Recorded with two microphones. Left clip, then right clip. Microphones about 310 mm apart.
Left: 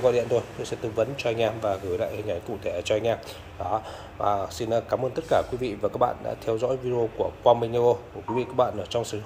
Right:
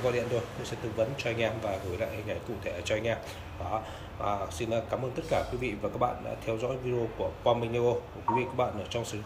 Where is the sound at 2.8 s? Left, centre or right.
Centre.